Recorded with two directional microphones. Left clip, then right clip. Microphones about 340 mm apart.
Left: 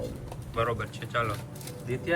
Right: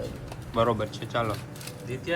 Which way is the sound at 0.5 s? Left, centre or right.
Centre.